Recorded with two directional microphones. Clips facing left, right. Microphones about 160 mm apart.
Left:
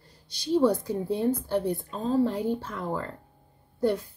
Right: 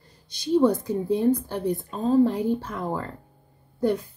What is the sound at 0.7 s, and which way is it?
A woman's voice, 15° right (ahead or behind).